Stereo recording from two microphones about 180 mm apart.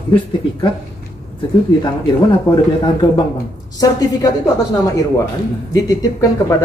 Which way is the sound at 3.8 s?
20° left (ahead or behind).